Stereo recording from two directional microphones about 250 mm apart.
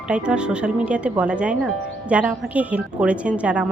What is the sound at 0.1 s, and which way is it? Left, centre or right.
A woman's voice, centre.